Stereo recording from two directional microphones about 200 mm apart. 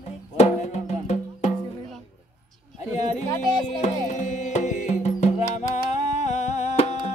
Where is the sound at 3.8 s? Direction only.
35° left (ahead or behind).